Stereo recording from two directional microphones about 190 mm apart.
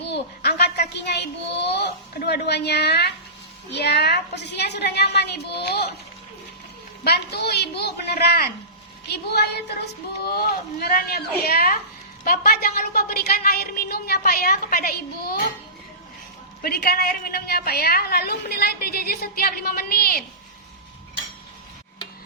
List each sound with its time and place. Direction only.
0.0 s a sound: 60° left (ahead or behind)
3.8 s a woman's voice: 60° left (ahead or behind)
7.0 s a woman's voice: 55° left (ahead or behind)
10.2 s a woman's voice: 55° left (ahead or behind)
16.6 s a woman's voice: 55° left (ahead or behind)